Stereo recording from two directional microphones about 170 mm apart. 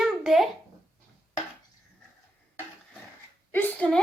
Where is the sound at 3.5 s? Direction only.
10° left (ahead or behind).